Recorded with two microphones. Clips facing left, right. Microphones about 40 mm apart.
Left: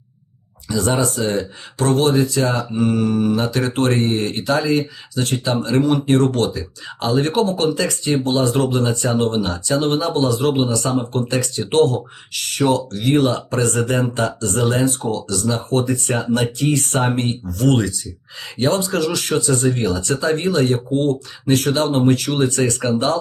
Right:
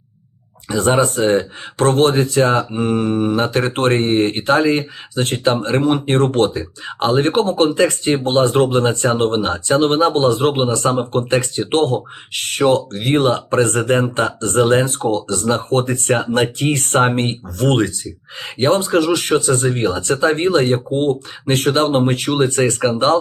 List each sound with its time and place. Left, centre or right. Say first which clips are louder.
0.7 s speech: right 4 dB; right